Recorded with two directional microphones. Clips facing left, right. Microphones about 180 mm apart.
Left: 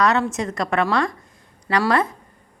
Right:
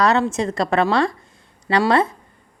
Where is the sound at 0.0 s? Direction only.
30° right (ahead or behind).